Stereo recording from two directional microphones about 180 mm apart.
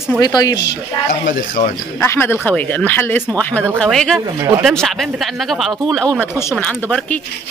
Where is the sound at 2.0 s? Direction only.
15° left (ahead or behind).